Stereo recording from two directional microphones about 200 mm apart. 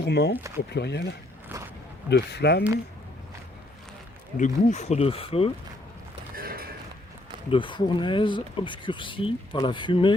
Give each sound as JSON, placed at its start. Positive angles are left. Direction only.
{"t": 0.0, "sound": "speech", "side_deg": 55}
{"t": 4.4, "sound": "speech", "side_deg": 40}
{"t": 6.3, "sound": "a sound", "side_deg": -45}
{"t": 7.5, "sound": "speech", "side_deg": 25}